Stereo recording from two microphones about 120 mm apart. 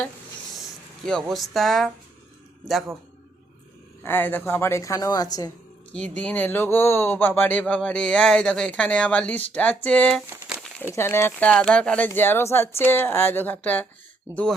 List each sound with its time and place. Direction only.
1.0 s speech: 5° left (ahead or behind)
4.0 s a woman's voice: 15° left (ahead or behind); by 5.5 s 30° left (ahead or behind)
5.9 s speech: 10° left (ahead or behind)